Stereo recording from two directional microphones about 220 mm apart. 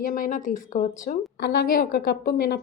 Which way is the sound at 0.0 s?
35° left (ahead or behind).